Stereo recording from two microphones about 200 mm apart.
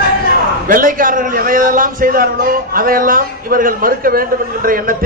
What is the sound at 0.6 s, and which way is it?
A man's voice, 45° right (ahead or behind).